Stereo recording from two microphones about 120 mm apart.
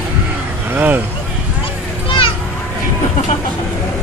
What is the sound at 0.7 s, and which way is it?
Vehicle, 15° right (ahead or behind).